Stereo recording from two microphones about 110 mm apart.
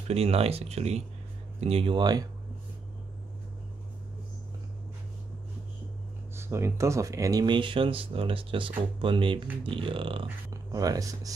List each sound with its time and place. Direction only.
0.1 s speech: 65° right (ahead or behind)
1.6 s speech: 60° right (ahead or behind)
2.0 s speech: 40° right (ahead or behind)
6.3 s speech: 25° right (ahead or behind)
7.4 s speech: 45° right (ahead or behind)
10.5 s speech: 35° right (ahead or behind)